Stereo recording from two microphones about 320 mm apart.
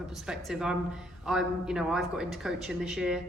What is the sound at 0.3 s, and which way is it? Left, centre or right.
A man's voice, centre.